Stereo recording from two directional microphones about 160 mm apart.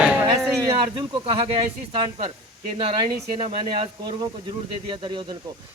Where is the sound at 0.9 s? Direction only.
35° right (ahead or behind).